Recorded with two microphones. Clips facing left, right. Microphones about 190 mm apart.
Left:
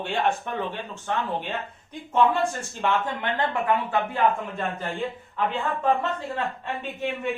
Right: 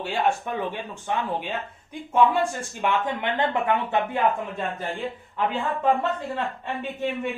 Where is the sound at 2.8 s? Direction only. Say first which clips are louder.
Right 1 dB; 15° right (ahead or behind).